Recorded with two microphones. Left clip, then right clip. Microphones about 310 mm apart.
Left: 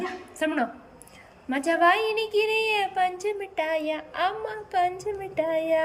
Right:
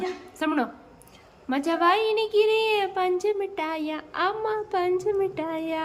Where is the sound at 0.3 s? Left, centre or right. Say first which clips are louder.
Even; centre.